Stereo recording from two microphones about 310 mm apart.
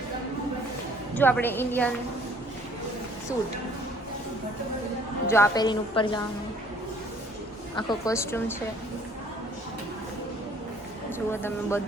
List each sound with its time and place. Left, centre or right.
1.1 s a woman's voice: centre
5.3 s a woman's voice: centre
7.8 s a woman's voice: centre
11.3 s a woman's voice: centre